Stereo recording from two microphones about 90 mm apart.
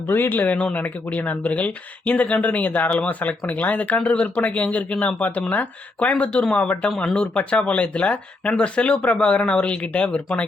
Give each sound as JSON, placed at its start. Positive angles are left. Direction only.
{"t": 0.1, "sound": "speech", "side_deg": 20}